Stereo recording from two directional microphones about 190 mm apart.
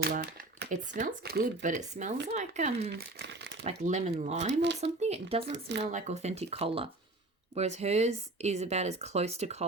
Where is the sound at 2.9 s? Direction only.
65° right (ahead or behind).